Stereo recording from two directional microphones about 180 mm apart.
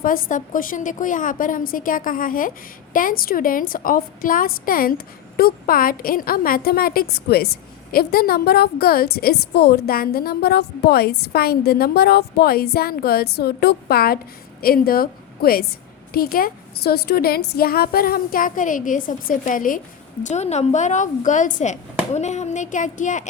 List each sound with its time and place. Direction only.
0.0 s a woman's voice: 50° left (ahead or behind)
20.2 s a woman's voice: 40° left (ahead or behind)